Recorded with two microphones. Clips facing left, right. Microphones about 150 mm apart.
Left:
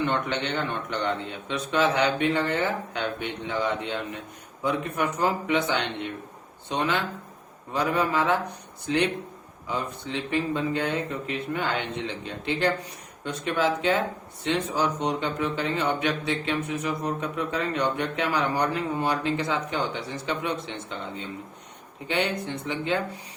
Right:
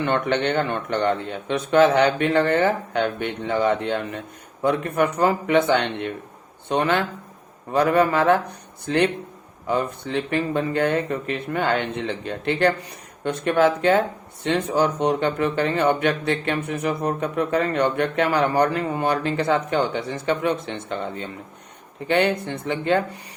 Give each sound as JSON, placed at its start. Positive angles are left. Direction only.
{"t": 0.0, "sound": "speech", "side_deg": -60}
{"t": 9.6, "sound": "speech", "side_deg": -55}